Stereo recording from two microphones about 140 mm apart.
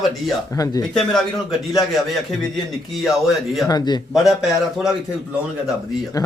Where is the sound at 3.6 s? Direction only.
30° left (ahead or behind).